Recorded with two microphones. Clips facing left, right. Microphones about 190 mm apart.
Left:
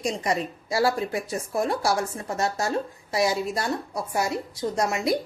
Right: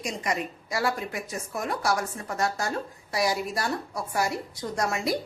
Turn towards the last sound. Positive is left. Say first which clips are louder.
# left 3 dB
turn(degrees=20)  # may be behind; listen again after turning